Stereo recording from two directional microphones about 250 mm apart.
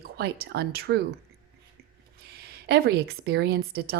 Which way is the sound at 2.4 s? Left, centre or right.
Right.